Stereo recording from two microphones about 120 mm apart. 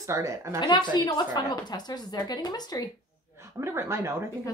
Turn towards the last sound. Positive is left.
turn(degrees=-25)  # may be behind; listen again after turning